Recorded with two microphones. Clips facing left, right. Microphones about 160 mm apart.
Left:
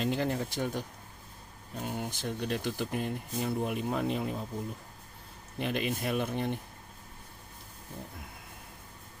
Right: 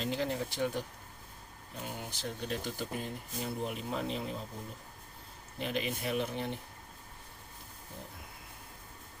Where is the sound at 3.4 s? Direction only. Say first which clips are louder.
Left 5 dB; 60° left (ahead or behind).